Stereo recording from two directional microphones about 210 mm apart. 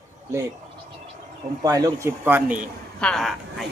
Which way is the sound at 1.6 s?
15° right (ahead or behind).